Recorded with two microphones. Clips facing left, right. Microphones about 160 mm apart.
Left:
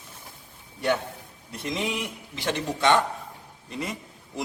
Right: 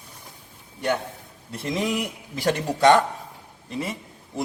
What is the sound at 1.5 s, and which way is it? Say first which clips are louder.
A man's voice: right 4 dB; 30° right (ahead or behind).